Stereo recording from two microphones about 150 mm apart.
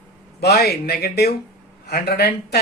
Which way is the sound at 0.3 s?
90° left.